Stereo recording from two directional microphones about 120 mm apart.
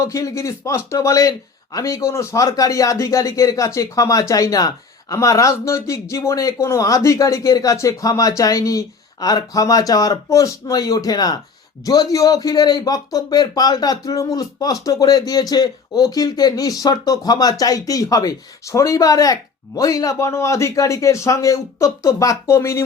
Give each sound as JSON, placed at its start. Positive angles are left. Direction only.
{"t": 0.0, "sound": "a man's voice", "side_deg": 25}